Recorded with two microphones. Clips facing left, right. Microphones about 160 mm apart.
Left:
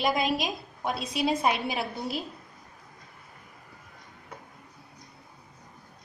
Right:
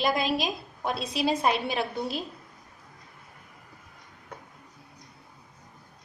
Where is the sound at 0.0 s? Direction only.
Centre (ahead or behind).